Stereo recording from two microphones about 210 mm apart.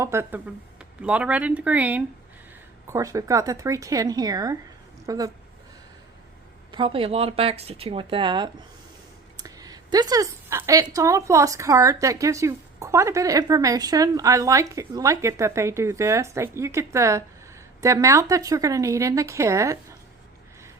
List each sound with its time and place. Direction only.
0.0 s speech: 10° right (ahead or behind)
6.7 s speech: 25° right (ahead or behind)